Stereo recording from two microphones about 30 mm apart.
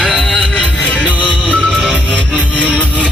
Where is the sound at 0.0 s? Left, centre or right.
Left.